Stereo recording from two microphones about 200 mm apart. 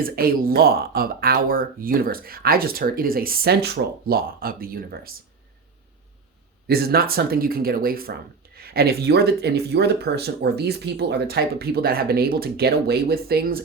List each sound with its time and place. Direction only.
0.0 s speech: 45° right (ahead or behind)
6.7 s speech: 50° right (ahead or behind)